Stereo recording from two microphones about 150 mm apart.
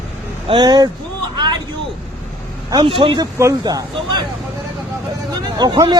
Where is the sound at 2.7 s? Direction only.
35° right (ahead or behind).